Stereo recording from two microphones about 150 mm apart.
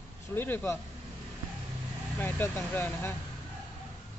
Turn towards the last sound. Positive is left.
turn(degrees=15)  # may be behind; listen again after turning